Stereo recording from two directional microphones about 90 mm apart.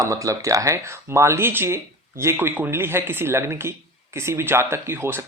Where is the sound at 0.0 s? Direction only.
35° right (ahead or behind).